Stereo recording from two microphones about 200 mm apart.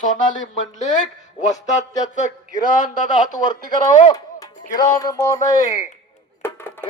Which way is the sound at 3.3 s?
20° left (ahead or behind).